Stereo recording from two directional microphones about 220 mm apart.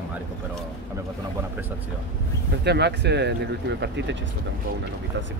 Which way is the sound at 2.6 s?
50° right (ahead or behind).